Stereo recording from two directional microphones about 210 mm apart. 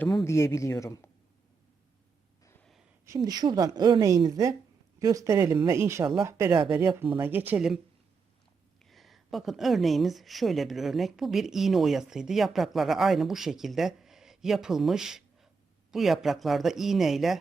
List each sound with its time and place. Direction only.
0.0 s speech: centre (ahead or behind)
0.3 s speech: 15° left (ahead or behind)
2.4 s gasp: 10° left (ahead or behind)
3.1 s a woman's voice: 20° right (ahead or behind)
8.9 s speech: centre (ahead or behind)